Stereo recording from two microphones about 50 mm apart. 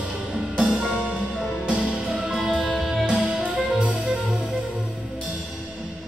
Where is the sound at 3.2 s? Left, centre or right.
Right.